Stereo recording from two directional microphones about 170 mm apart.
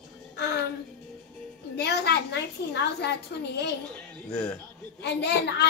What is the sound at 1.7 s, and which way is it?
A child's voice, 75° left (ahead or behind).